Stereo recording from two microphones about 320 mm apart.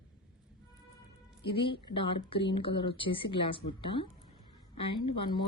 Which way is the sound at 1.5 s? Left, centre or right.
Centre.